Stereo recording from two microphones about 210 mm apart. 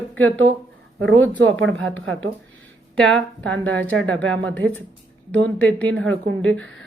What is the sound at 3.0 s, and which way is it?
A woman's voice, 5° left (ahead or behind).